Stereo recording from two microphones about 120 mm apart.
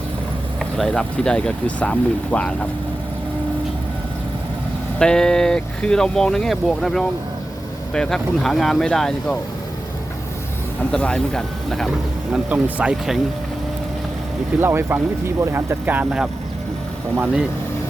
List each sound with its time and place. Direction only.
0.6 s speech: 5° left (ahead or behind)
4.9 s speech: 5° left (ahead or behind)
10.9 s speech: 5° left (ahead or behind)
12.3 s speech: 10° right (ahead or behind)
14.6 s speech: 20° right (ahead or behind)